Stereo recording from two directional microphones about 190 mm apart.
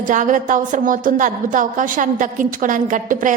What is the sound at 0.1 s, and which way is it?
A woman's voice, 40° right (ahead or behind).